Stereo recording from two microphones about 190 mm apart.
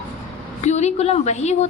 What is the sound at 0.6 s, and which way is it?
A woman's voice, 35° left (ahead or behind).